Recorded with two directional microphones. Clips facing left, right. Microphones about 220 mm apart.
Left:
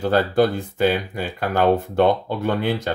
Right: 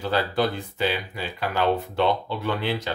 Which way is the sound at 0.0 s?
50° left (ahead or behind).